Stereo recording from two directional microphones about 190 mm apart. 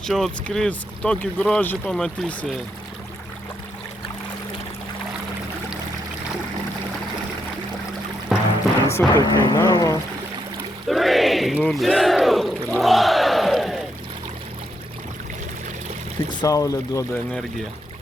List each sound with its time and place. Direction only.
0.0 s speech: centre (ahead or behind)
8.3 s music: centre (ahead or behind)
8.9 s speech: 15° left (ahead or behind)
10.8 s speech: centre (ahead or behind)
16.3 s speech: 20° left (ahead or behind)